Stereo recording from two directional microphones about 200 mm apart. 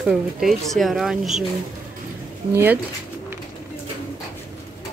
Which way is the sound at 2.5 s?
10° right (ahead or behind).